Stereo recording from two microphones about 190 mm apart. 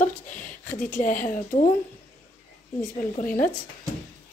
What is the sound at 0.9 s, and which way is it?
Speech, 45° left (ahead or behind).